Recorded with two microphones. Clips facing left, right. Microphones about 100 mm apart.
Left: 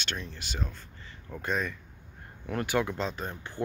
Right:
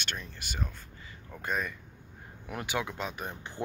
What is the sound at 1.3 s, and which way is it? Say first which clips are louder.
Speech: left 2 dB; 5° right (ahead or behind).